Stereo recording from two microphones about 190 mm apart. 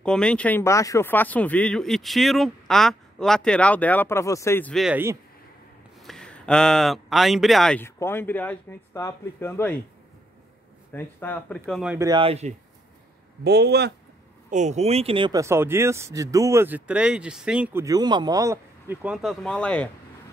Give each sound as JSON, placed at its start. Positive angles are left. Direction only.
{"t": 0.0, "sound": "speech", "side_deg": 5}
{"t": 6.0, "sound": "speech", "side_deg": 5}
{"t": 10.9, "sound": "speech", "side_deg": 10}
{"t": 12.0, "sound": "speech", "side_deg": -25}
{"t": 13.4, "sound": "speech", "side_deg": -60}
{"t": 14.5, "sound": "speech", "side_deg": -40}
{"t": 17.8, "sound": "speech", "side_deg": -20}